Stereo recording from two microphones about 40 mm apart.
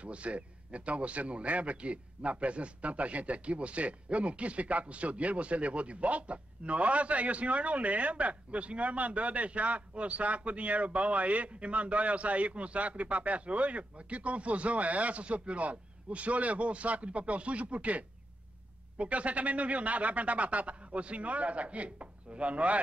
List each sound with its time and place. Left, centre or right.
0.0 s a man's voice: right